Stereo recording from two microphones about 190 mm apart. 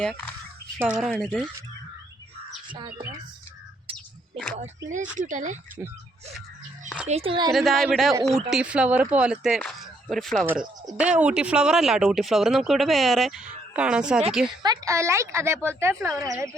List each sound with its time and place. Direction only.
0.8 s speech: 5° right (ahead or behind)
4.9 s speech: 40° right (ahead or behind)
7.1 s a woman's voice: 30° right (ahead or behind)
7.5 s speech: centre (ahead or behind)
14.6 s speech: 20° right (ahead or behind)